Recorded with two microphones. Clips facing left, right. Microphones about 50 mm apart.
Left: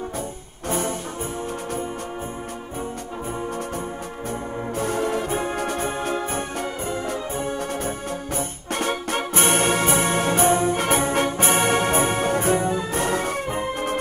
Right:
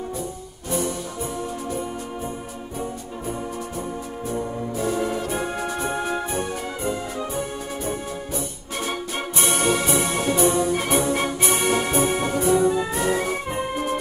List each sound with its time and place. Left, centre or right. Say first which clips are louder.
0.7 s music: even; left
4.3 s music: right 2 dB; left
5.3 s brass instrument: left 1 dB; left
5.6 s music: left 1 dB; left
6.8 s music: even; left
8.7 s music: left 4 dB; left
9.3 s music: left 1 dB; left
11.3 s brass instrument: left 2 dB; left
12.9 s music: even; left